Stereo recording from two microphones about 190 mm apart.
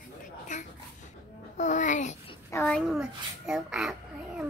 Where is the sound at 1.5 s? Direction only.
40° left (ahead or behind).